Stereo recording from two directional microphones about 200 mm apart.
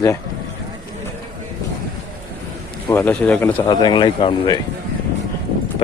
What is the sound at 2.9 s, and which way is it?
Speech, 10° left (ahead or behind).